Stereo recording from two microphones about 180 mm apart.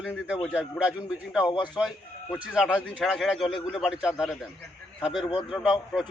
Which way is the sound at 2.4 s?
5° right (ahead or behind).